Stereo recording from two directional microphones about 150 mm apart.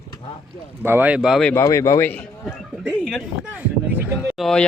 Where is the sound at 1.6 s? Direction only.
20° left (ahead or behind).